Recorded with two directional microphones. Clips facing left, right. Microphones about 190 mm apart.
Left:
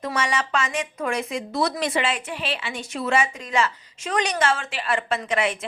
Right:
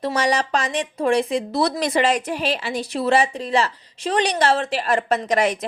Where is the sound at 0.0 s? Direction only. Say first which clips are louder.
Right 5 dB; 35° right (ahead or behind).